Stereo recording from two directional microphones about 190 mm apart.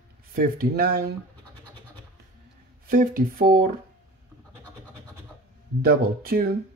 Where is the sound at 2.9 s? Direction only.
50° right (ahead or behind).